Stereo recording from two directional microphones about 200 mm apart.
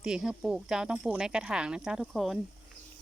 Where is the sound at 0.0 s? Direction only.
5° right (ahead or behind).